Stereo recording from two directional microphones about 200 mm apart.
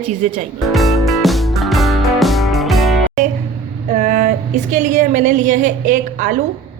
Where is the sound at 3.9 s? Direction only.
40° right (ahead or behind).